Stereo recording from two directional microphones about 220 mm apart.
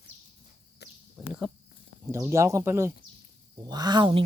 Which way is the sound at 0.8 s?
50° left (ahead or behind).